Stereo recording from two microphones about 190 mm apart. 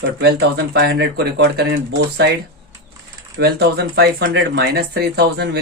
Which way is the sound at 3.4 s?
55° right (ahead or behind).